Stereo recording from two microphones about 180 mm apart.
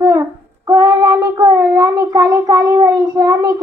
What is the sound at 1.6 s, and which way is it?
A child's voice, 15° right (ahead or behind).